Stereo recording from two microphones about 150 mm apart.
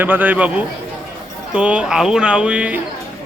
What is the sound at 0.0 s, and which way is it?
A man's voice, 10° right (ahead or behind).